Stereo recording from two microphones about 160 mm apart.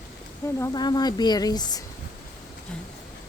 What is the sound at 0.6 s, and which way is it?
Speech, 25° left (ahead or behind).